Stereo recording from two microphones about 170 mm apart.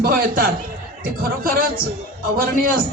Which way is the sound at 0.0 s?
60° right (ahead or behind).